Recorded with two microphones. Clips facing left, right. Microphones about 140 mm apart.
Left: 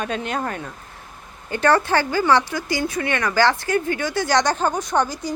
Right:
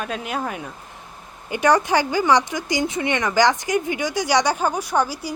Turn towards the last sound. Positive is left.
turn(degrees=-10)  # may be behind; listen again after turning